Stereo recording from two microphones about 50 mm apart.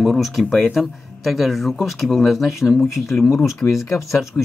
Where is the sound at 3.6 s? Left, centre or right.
Left.